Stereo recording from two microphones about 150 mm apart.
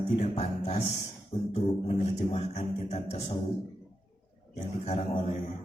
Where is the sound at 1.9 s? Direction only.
45° left (ahead or behind).